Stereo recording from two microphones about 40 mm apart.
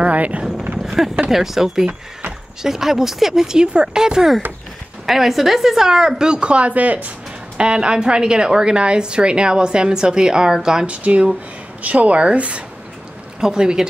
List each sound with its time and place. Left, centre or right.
0.0 s vehicle: right
0.8 s speech: centre
5.0 s speech: centre; by 7.1 s right
7.5 s a woman's voice: right
10.9 s speech: right
13.4 s speech: centre